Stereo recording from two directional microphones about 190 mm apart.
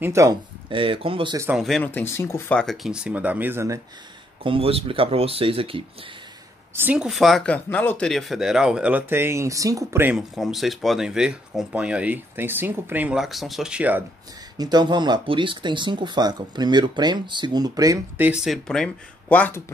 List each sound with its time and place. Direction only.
0.0 s speech: 15° right (ahead or behind)
0.7 s speech: 25° right (ahead or behind)
1.5 s speech: centre (ahead or behind)
2.6 s speech: centre (ahead or behind); by 3.8 s 15° right (ahead or behind)
4.4 s speech: 30° right (ahead or behind)
6.7 s speech: 10° right (ahead or behind)
14.6 s speech: 20° right (ahead or behind); by 19.6 s 10° left (ahead or behind)